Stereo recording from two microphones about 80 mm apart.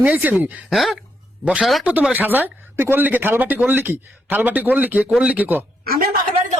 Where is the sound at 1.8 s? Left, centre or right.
Centre.